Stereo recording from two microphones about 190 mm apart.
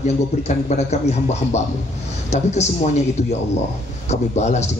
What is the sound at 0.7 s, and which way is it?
Speech, 35° left (ahead or behind).